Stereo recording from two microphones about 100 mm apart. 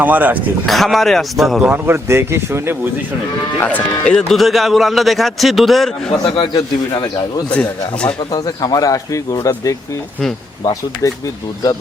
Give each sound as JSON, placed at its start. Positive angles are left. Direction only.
{"t": 0.0, "sound": "a man's voice", "side_deg": -15}
{"t": 0.7, "sound": "a man's voice", "side_deg": 0}
{"t": 1.7, "sound": "speech", "side_deg": -25}
{"t": 3.6, "sound": "a man's voice", "side_deg": 15}
{"t": 4.0, "sound": "a man's voice", "side_deg": 5}
{"t": 6.2, "sound": "a man's voice", "side_deg": 55}
{"t": 6.6, "sound": "speech", "side_deg": 40}
{"t": 7.5, "sound": "a man's voice", "side_deg": 10}
{"t": 8.3, "sound": "speech", "side_deg": 40}